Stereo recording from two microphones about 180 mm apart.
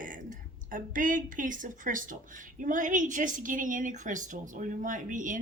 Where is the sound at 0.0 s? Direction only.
50° right (ahead or behind).